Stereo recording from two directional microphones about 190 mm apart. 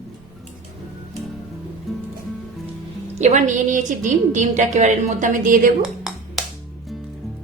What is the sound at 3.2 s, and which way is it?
A woman's voice, 40° right (ahead or behind).